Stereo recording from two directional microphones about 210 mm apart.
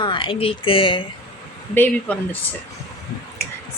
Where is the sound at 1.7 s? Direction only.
10° left (ahead or behind).